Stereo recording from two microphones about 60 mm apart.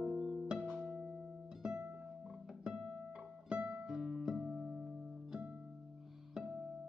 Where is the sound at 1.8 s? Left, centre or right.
Right.